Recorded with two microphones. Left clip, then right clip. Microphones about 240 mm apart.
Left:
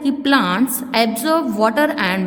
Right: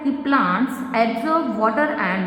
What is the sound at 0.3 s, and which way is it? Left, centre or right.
A woman's voice, left.